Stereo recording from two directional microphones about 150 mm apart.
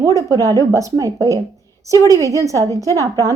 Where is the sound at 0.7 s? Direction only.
20° right (ahead or behind).